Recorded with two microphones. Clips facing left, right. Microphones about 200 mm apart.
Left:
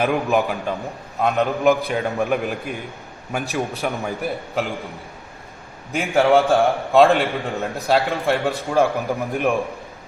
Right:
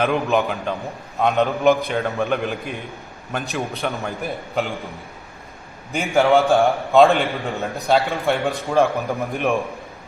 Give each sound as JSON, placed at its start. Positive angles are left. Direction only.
{"t": 0.0, "sound": "a man's voice", "side_deg": 5}
{"t": 5.9, "sound": "a man's voice", "side_deg": 0}